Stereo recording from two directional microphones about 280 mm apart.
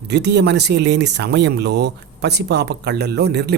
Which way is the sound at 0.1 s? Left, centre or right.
Right.